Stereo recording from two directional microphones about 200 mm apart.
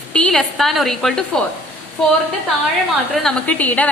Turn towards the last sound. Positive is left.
turn(degrees=10)  # may be behind; listen again after turning